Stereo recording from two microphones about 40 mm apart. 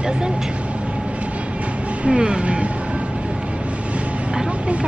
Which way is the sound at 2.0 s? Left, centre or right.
Right.